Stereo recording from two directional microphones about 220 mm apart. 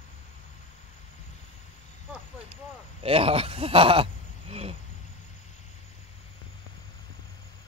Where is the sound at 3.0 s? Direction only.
25° right (ahead or behind).